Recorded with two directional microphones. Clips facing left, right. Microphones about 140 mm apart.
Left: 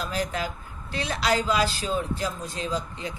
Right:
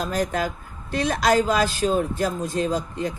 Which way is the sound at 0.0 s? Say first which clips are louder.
Right 5 dB; 40° right (ahead or behind).